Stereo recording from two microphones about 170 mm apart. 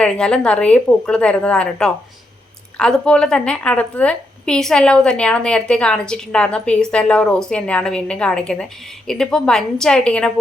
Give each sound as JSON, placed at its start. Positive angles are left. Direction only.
{"t": 0.0, "sound": "a woman's voice", "side_deg": 5}